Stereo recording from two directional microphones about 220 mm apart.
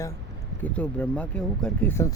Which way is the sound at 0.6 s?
5° left (ahead or behind).